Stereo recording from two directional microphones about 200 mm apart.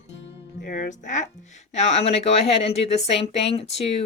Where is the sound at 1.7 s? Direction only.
30° left (ahead or behind).